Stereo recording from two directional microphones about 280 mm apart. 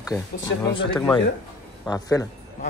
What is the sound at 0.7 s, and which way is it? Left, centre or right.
Speech, centre.